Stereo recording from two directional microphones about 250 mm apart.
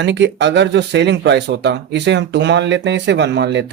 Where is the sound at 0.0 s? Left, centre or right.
Right.